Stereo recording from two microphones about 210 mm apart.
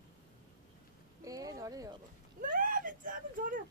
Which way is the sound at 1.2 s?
15° right (ahead or behind).